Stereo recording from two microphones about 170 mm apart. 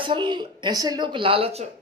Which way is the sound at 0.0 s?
30° right (ahead or behind).